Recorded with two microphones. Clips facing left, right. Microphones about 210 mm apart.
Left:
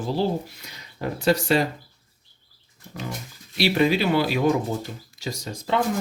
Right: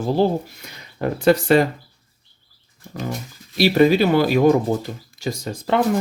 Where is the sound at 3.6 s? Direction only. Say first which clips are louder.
Right 6 dB; 45° right (ahead or behind).